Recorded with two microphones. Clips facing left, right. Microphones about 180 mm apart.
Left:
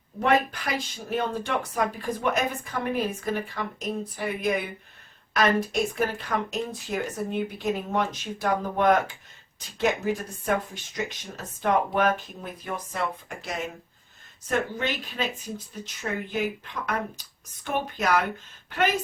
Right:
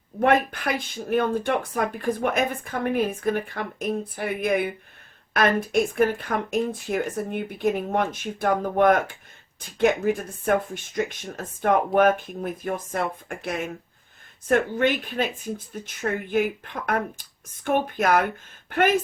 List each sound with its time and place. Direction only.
0.2 s speech: 55° right (ahead or behind)